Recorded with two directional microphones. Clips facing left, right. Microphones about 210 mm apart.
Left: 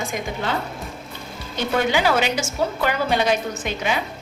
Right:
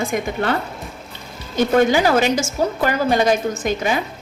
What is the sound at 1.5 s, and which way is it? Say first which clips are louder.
A woman's voice: right 6 dB; 45° right (ahead or behind).